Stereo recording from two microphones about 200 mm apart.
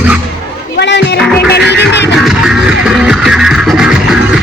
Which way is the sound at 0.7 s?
60° left (ahead or behind).